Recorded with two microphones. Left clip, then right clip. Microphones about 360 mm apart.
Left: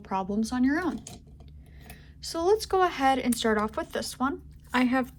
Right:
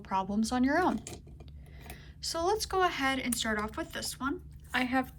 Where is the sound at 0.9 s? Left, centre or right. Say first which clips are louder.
Right 1 dB; right.